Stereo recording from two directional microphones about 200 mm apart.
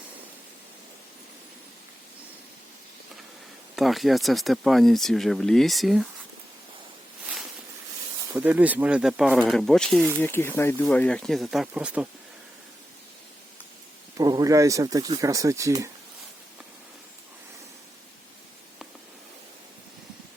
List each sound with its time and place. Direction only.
3.8 s speech: centre (ahead or behind)
8.3 s speech: 10° right (ahead or behind)
14.2 s speech: 20° right (ahead or behind)